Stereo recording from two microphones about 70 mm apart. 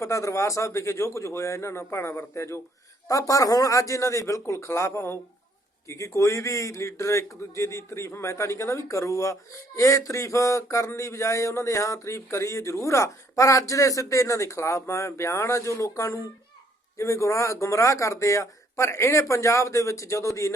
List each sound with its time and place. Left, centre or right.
0.0 s a man's voice: left
3.1 s a man's voice: left